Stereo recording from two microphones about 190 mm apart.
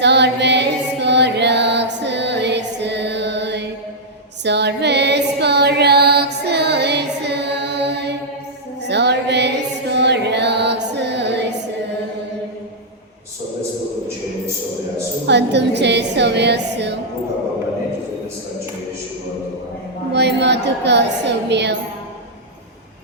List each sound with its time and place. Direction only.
0.0 s female singing: 65° right (ahead or behind)
8.8 s music: 65° right (ahead or behind)
15.3 s music: 65° right (ahead or behind)
20.1 s a sound: 65° right (ahead or behind)